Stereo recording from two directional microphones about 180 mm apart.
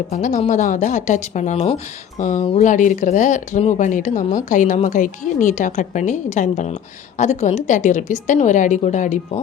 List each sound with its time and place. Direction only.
0.1 s a woman's voice: 40° left (ahead or behind)